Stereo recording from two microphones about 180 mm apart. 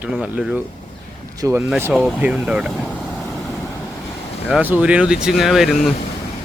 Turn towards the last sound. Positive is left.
turn(degrees=0)  # may be behind; listen again after turning